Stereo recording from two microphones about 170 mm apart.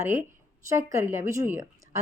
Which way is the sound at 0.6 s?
15° right (ahead or behind).